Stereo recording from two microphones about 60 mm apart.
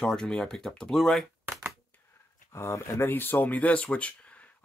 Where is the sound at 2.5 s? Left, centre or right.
Left.